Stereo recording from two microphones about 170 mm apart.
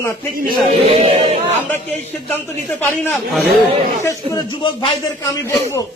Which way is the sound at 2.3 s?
10° left (ahead or behind).